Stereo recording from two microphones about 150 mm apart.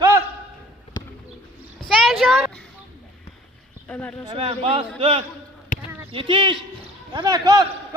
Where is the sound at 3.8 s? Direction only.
10° left (ahead or behind).